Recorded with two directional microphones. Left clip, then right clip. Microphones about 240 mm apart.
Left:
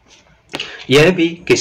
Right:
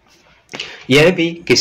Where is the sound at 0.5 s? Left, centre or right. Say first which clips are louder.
Left 1 dB; right.